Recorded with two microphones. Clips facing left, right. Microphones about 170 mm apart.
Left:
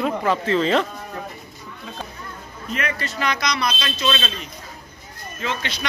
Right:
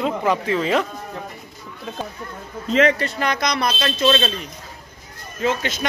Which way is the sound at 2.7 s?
90° right.